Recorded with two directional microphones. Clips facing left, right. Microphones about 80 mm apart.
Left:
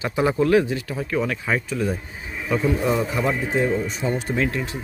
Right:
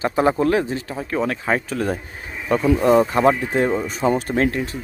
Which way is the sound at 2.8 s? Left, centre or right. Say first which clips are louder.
Right 7 dB; right.